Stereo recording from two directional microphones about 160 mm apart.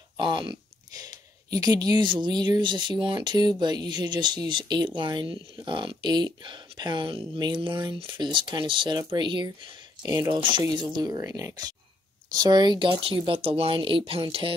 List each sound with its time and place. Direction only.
0.2 s speech: 30° right (ahead or behind)